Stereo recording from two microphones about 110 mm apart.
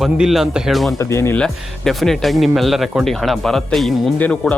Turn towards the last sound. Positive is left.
turn(degrees=10)  # may be behind; listen again after turning